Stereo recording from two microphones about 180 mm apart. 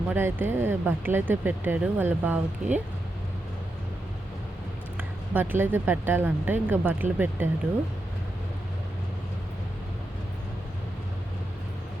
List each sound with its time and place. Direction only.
0.1 s speech: 10° right (ahead or behind)
4.9 s speech: 10° right (ahead or behind)